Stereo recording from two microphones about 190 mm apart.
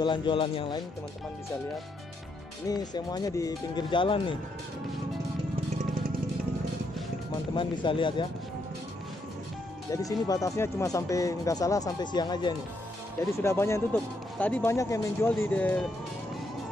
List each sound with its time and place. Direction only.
0.0 s speech: 25° left (ahead or behind)
2.7 s speech: 20° left (ahead or behind)
7.5 s speech: 25° left (ahead or behind)
10.0 s speech: 20° left (ahead or behind)